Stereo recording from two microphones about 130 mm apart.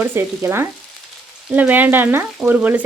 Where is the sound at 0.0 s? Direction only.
15° right (ahead or behind).